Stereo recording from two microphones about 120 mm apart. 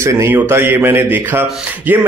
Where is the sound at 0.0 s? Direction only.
25° right (ahead or behind).